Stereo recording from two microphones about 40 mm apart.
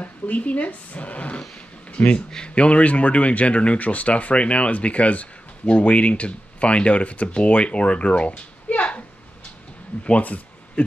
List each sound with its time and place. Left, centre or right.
0.0 s speech: left
10.0 s speech: left